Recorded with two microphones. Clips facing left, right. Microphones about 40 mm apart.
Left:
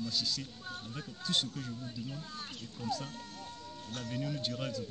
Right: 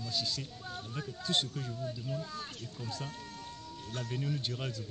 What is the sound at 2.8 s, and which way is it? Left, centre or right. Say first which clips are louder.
Speech: left 5 dB; right.